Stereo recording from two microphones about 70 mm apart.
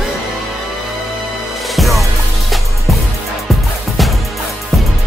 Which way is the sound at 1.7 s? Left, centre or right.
Centre.